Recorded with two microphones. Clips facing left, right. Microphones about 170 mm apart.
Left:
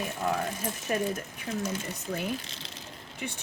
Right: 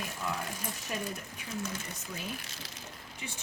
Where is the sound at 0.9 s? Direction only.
60° left (ahead or behind).